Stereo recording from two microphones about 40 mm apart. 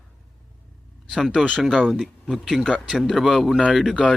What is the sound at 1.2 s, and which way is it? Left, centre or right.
Speech, centre.